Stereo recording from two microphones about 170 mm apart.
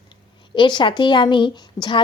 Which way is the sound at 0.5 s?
30° left (ahead or behind).